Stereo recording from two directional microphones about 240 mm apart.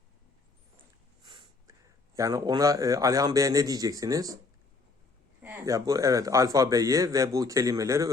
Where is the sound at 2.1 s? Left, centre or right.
Centre.